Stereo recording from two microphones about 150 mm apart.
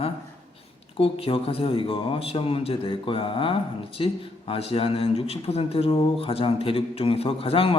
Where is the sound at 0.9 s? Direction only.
40° left (ahead or behind).